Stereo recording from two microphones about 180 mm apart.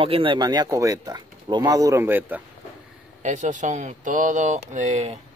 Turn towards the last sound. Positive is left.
turn(degrees=-40)  # may be behind; listen again after turning